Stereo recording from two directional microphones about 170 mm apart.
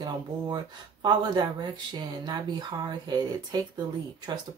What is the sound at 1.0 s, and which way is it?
Speech, 25° right (ahead or behind).